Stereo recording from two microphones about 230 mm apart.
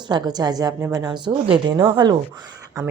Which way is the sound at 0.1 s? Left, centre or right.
Centre.